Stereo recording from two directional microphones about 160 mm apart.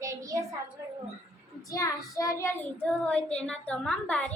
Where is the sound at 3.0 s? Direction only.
5° left (ahead or behind).